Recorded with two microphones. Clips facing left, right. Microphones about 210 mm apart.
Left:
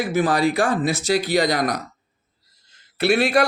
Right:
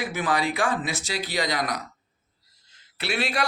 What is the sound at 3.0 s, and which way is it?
Speech, 45° left (ahead or behind).